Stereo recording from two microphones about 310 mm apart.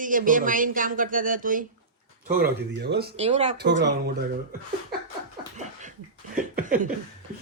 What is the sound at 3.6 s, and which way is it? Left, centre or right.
Speech, right.